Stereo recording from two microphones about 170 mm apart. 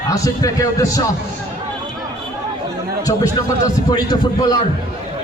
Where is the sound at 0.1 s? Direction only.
20° left (ahead or behind).